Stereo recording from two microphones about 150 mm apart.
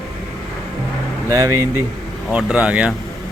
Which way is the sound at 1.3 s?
20° right (ahead or behind).